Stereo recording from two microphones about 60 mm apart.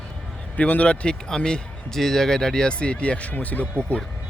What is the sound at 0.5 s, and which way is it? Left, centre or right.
A man's voice, left.